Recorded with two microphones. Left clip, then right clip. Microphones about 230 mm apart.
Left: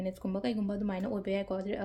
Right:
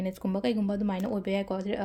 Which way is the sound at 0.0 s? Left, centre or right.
Right.